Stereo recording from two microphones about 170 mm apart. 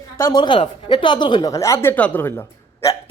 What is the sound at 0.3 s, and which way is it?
Speech, 25° left (ahead or behind).